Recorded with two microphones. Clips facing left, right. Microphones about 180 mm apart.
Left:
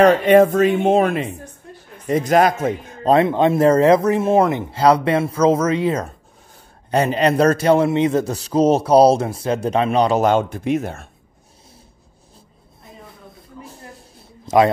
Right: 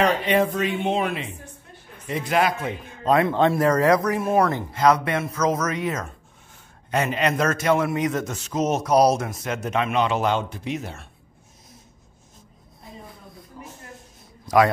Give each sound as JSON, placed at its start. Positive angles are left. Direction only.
{"t": 0.0, "sound": "a woman's voice", "side_deg": 50}
{"t": 3.2, "sound": "a man's voice", "side_deg": 20}
{"t": 13.6, "sound": "a sound", "side_deg": 35}